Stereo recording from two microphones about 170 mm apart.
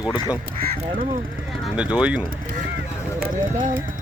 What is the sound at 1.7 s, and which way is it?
Speech, 5° right (ahead or behind).